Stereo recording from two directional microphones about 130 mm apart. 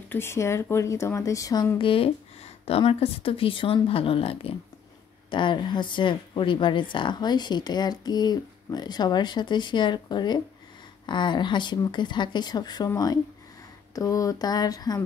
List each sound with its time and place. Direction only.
0.1 s speech: 20° left (ahead or behind)
1.8 s speech: 45° left (ahead or behind)